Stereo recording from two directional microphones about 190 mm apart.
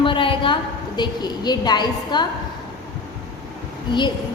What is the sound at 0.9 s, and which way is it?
A woman's voice, 20° left (ahead or behind).